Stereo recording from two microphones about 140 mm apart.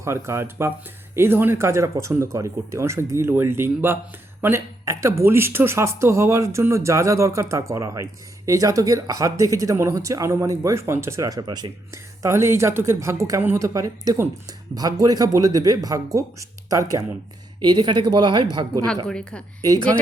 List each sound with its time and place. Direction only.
0.0 s speech: 20° right (ahead or behind)
12.2 s a woman's voice: 20° right (ahead or behind)
19.0 s a woman's voice: 5° left (ahead or behind)
19.6 s speech: 25° right (ahead or behind)